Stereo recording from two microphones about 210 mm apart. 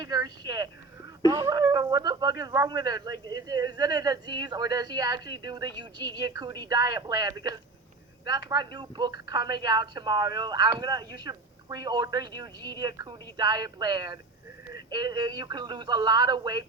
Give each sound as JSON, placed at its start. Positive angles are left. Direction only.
{"t": 0.0, "sound": "a woman's voice", "side_deg": -20}